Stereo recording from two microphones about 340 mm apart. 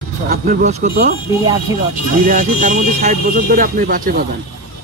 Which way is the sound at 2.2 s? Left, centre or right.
Right.